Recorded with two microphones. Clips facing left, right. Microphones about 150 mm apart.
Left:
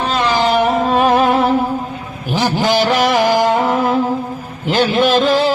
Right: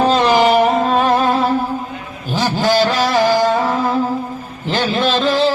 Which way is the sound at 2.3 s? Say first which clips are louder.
Even; 15° left (ahead or behind).